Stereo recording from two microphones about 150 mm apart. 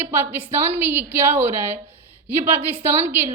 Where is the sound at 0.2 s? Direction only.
15° right (ahead or behind).